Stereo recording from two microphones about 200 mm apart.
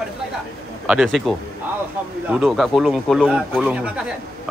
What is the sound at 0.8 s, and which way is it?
A man's voice, 5° right (ahead or behind).